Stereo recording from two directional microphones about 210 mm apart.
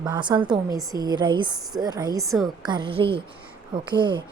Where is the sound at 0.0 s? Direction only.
20° right (ahead or behind).